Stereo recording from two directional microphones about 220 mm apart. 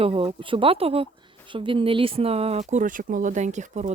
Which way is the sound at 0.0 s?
25° right (ahead or behind).